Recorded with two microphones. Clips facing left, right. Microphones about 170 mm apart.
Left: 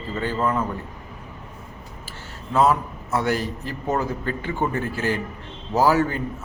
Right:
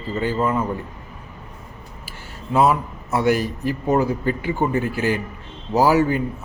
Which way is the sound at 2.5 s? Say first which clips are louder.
Right 2 dB; 15° right (ahead or behind).